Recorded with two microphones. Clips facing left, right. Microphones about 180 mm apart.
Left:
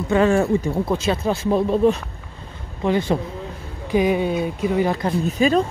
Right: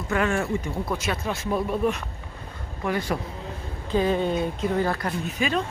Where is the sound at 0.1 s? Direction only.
30° left (ahead or behind).